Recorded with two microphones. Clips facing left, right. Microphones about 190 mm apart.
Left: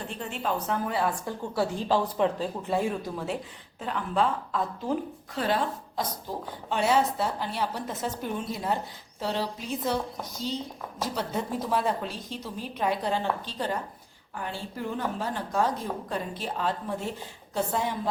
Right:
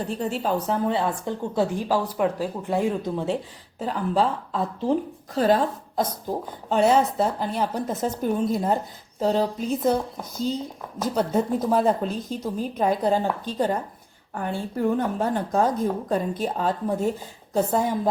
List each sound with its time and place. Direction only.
0.1 s a woman's voice: 40° right (ahead or behind)
3.8 s a woman's voice: 35° right (ahead or behind)
11.1 s a woman's voice: 45° right (ahead or behind)